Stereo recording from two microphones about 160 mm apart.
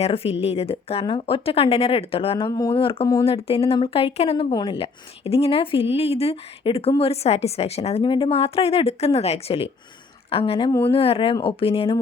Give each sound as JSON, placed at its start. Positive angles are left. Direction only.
{"t": 0.0, "sound": "speech", "side_deg": 40}
{"t": 2.5, "sound": "speech", "side_deg": 20}
{"t": 2.7, "sound": "a woman's voice", "side_deg": 35}
{"t": 10.7, "sound": "speech", "side_deg": 15}
{"t": 10.9, "sound": "speech", "side_deg": 35}